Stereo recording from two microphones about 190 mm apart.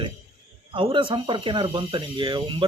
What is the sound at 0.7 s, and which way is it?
Speech, 25° right (ahead or behind).